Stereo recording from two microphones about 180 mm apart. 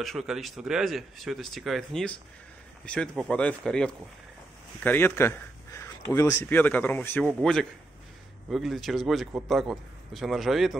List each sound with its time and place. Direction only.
0.0 s a man's voice: centre (ahead or behind)